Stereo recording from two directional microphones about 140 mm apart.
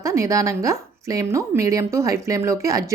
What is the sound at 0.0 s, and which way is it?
A woman's voice, 20° right (ahead or behind).